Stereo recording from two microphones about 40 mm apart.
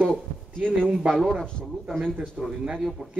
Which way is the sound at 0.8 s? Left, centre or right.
Right.